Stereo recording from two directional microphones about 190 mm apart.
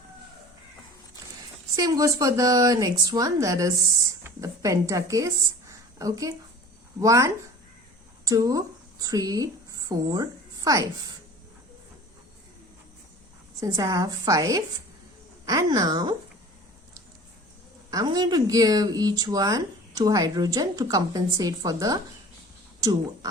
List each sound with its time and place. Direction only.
1.7 s a woman's voice: 20° right (ahead or behind)
13.6 s a woman's voice: 15° right (ahead or behind)
17.9 s speech: 20° right (ahead or behind)